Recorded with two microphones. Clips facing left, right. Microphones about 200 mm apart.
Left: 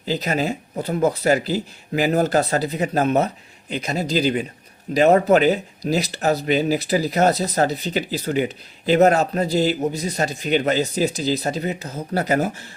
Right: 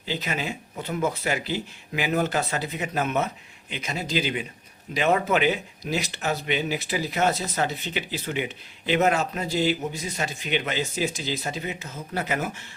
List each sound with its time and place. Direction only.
0.0 s speech: 40° left (ahead or behind)